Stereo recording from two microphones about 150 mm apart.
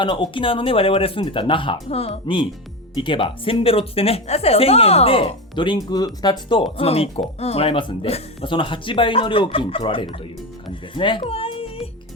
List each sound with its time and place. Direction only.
0.0 s a woman's voice: 35° left (ahead or behind)